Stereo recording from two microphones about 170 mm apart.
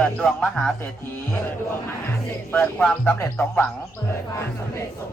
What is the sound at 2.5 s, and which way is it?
Speech, 10° left (ahead or behind).